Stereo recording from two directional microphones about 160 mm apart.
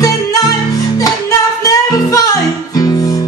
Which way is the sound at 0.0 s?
20° left (ahead or behind).